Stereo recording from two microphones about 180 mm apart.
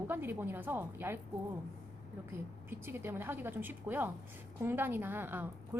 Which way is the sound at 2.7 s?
10° right (ahead or behind).